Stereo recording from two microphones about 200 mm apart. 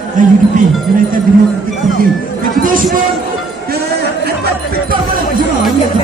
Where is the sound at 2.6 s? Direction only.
45° right (ahead or behind).